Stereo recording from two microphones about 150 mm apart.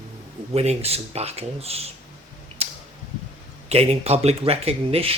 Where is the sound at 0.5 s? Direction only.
45° right (ahead or behind).